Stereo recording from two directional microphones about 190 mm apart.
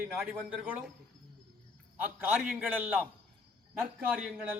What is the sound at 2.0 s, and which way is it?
A man's voice, 10° right (ahead or behind).